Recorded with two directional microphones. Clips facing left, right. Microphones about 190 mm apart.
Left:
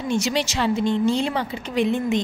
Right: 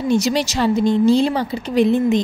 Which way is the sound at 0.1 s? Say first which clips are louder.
Right 5 dB; 40° right (ahead or behind).